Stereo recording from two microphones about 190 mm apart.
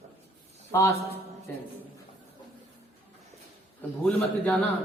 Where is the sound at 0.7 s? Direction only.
15° left (ahead or behind).